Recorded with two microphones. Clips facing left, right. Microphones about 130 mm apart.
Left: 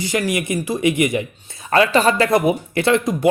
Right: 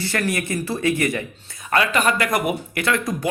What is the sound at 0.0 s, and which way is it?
Speech, 15° left (ahead or behind).